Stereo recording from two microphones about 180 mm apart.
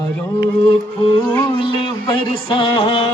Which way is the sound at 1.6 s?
30° left (ahead or behind).